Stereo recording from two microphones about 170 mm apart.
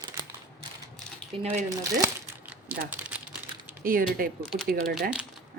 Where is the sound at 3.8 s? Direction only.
55° right (ahead or behind).